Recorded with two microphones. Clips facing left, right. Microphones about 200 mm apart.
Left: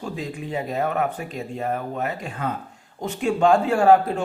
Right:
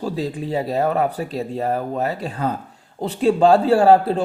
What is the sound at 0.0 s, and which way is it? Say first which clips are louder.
A man's voice: right 6 dB; 35° right (ahead or behind).